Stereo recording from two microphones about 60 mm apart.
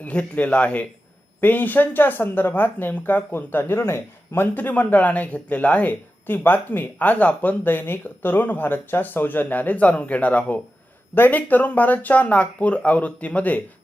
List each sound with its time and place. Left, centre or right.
0.0 s speech: left